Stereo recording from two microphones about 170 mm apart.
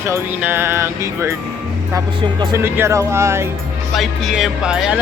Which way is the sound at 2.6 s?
15° right (ahead or behind).